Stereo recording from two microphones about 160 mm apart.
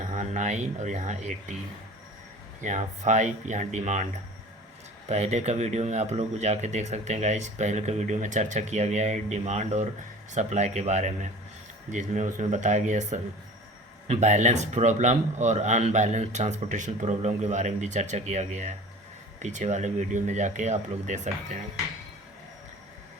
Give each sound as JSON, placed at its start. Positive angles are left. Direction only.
{"t": 0.1, "sound": "speech", "side_deg": -50}
{"t": 2.6, "sound": "speech", "side_deg": -50}
{"t": 5.0, "sound": "speech", "side_deg": -45}